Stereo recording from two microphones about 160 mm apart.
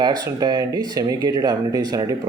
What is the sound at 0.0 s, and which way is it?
Speech, 25° right (ahead or behind).